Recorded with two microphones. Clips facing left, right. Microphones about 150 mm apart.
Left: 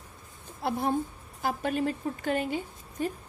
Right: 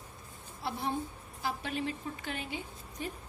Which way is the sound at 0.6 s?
50° left (ahead or behind).